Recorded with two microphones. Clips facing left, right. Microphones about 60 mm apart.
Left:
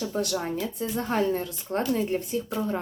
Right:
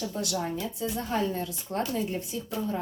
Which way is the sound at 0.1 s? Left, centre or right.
Left.